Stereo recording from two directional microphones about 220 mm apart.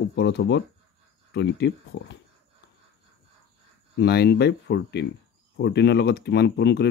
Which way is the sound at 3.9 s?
50° left (ahead or behind).